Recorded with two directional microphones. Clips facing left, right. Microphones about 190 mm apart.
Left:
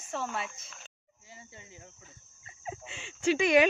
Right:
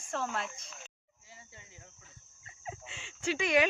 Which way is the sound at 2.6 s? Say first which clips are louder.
Left 3 dB; 15° left (ahead or behind).